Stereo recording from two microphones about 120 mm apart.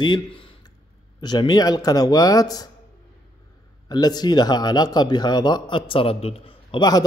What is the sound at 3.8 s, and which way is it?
A man's voice, 35° left (ahead or behind).